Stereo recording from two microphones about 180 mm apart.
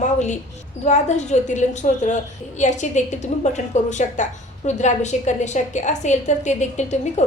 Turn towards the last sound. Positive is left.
turn(degrees=40)  # may be behind; listen again after turning